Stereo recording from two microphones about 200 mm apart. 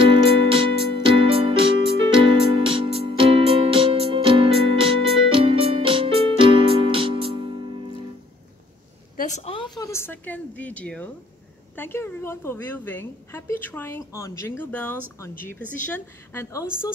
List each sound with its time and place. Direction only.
0.0 s music: 25° right (ahead or behind)
9.1 s a sound: 40° left (ahead or behind); by 11.1 s 5° left (ahead or behind)
11.7 s a woman's voice: 10° left (ahead or behind)